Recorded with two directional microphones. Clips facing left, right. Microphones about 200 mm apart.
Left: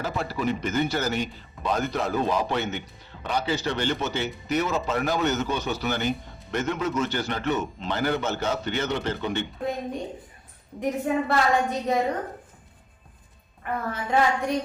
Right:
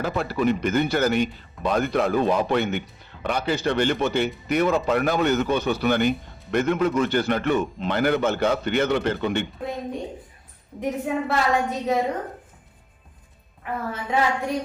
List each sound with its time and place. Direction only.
0.0 s a man's voice: 60° right (ahead or behind)
10.8 s a woman's voice: centre (ahead or behind)
13.6 s a woman's voice: centre (ahead or behind)